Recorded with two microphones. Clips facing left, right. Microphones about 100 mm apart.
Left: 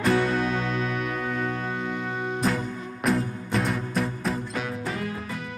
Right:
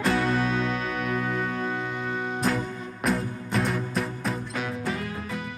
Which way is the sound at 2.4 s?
Centre (ahead or behind).